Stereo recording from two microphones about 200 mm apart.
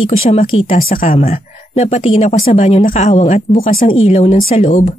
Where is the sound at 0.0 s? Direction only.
30° left (ahead or behind).